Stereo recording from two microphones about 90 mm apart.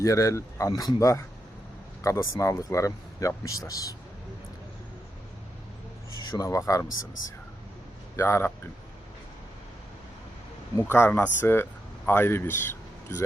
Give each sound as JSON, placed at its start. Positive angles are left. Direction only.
{"t": 0.0, "sound": "speech", "side_deg": 35}
{"t": 6.3, "sound": "speech", "side_deg": 40}
{"t": 8.1, "sound": "speech", "side_deg": 30}
{"t": 10.8, "sound": "speech", "side_deg": 25}